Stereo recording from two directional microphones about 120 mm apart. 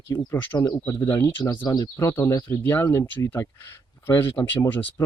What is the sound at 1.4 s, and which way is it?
Speech, 35° left (ahead or behind).